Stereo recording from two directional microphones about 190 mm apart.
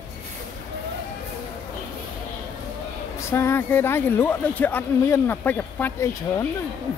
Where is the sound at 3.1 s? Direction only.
15° left (ahead or behind).